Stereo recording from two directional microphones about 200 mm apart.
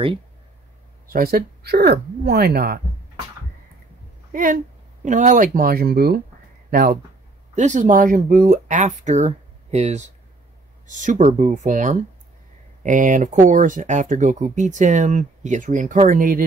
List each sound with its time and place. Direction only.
1.0 s speech: 45° right (ahead or behind)
4.3 s speech: 40° right (ahead or behind)